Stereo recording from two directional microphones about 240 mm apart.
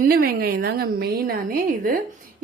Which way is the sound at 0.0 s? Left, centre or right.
Right.